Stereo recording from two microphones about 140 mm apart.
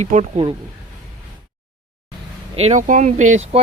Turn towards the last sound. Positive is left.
turn(degrees=-55)  # may be behind; listen again after turning